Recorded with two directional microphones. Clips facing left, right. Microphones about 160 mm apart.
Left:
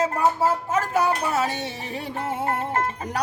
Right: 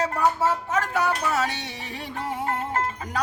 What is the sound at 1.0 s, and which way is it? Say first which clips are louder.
Music: left 2 dB; 25° left (ahead or behind).